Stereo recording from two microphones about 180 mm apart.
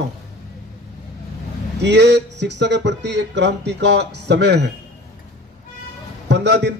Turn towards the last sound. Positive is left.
turn(degrees=-75)  # may be behind; listen again after turning